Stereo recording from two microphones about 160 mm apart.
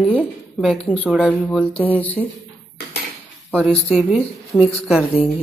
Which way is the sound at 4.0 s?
5° left (ahead or behind).